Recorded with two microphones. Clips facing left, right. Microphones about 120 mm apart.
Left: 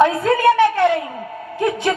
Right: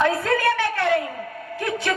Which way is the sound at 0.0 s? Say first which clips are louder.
Left 6 dB; 20° left (ahead or behind).